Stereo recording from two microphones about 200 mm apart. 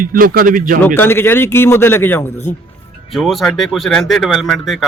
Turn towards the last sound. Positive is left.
turn(degrees=0)  # may be behind; listen again after turning